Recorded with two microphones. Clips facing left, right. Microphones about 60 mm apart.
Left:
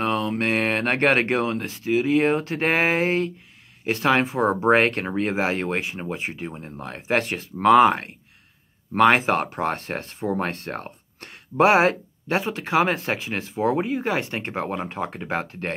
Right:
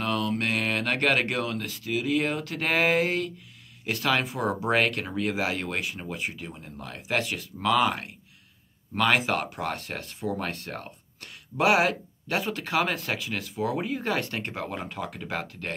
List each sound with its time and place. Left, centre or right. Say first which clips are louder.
0.0 s speech: left 4 dB; left